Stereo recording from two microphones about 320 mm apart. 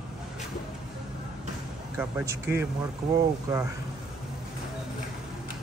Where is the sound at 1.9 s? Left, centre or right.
Centre.